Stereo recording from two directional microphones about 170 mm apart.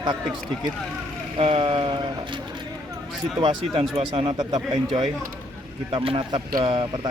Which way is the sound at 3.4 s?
30° right (ahead or behind).